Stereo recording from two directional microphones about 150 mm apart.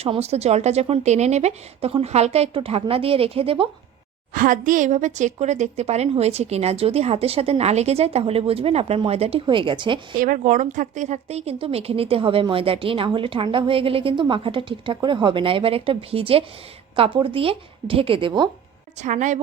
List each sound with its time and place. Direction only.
0.0 s a woman's voice: 45° right (ahead or behind)
4.4 s a woman's voice: 65° right (ahead or behind); by 10.2 s 35° right (ahead or behind)
10.2 s a woman's voice: 65° right (ahead or behind); by 18.4 s 35° right (ahead or behind)
19.0 s a woman's voice: 55° right (ahead or behind)